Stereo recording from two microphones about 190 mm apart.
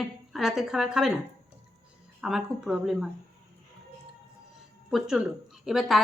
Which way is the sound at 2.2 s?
Centre (ahead or behind).